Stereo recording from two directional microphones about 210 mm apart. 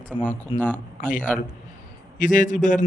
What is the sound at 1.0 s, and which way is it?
Speech, 40° left (ahead or behind).